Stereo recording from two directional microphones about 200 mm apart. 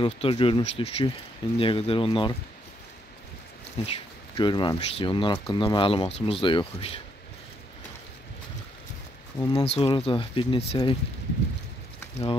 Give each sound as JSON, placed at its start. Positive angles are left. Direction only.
{"t": 0.0, "sound": "speech", "side_deg": 25}
{"t": 3.8, "sound": "speech", "side_deg": 30}
{"t": 9.4, "sound": "speech", "side_deg": 20}